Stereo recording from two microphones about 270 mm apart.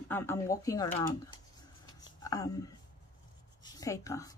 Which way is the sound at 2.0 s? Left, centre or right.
Centre.